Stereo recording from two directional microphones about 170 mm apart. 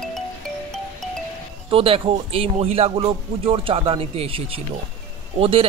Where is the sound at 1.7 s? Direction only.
35° right (ahead or behind).